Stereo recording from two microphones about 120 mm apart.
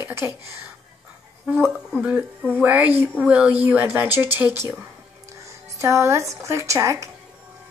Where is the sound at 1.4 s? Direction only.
15° right (ahead or behind).